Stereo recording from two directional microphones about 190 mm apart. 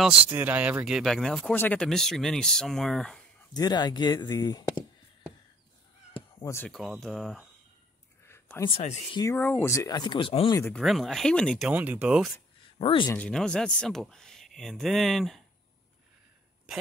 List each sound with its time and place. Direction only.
0.3 s speech: 10° right (ahead or behind)
3.5 s speech: 20° left (ahead or behind)
6.1 s a sound: 15° left (ahead or behind)
6.7 s speech: centre (ahead or behind)
8.3 s a sound: 10° left (ahead or behind)
8.6 s speech: 30° left (ahead or behind)
9.1 s speech: 15° left (ahead or behind)
10.8 s speech: centre (ahead or behind)
12.7 s speech: 30° left (ahead or behind)
13.1 s speech: 5° left (ahead or behind)